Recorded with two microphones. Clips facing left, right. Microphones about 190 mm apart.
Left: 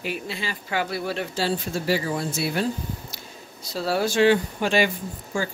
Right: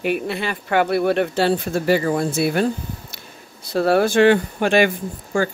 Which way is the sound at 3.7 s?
55° right (ahead or behind).